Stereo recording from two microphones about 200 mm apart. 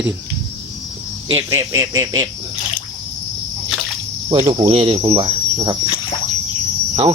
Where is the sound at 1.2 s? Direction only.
15° right (ahead or behind).